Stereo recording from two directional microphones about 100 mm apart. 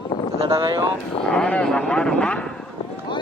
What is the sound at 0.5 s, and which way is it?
Speech, 45° right (ahead or behind).